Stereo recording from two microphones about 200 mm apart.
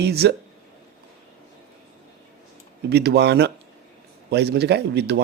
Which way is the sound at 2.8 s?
55° right (ahead or behind).